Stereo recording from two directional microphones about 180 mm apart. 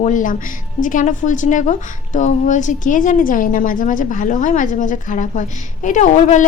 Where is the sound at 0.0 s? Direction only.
45° left (ahead or behind).